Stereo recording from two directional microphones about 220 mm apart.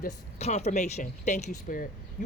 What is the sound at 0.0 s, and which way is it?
Speech, 30° left (ahead or behind).